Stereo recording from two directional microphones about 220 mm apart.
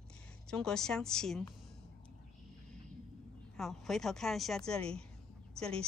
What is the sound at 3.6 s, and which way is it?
A woman's voice, centre (ahead or behind).